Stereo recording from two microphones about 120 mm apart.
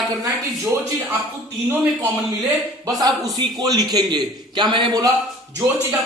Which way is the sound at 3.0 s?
35° right (ahead or behind).